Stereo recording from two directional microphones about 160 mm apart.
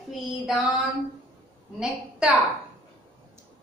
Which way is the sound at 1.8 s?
5° right (ahead or behind).